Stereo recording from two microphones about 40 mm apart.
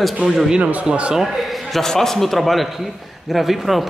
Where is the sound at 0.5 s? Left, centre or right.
Right.